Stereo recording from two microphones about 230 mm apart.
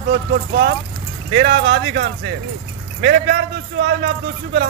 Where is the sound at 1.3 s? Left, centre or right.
Right.